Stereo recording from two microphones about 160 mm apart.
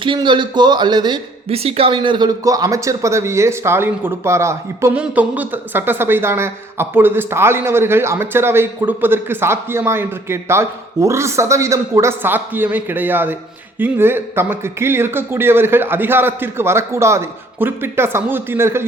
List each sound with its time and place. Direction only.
0.0 s a man's voice: 30° right (ahead or behind); by 18.9 s 15° right (ahead or behind)